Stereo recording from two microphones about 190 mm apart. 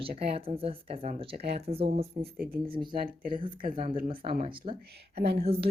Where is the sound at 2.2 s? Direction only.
50° right (ahead or behind).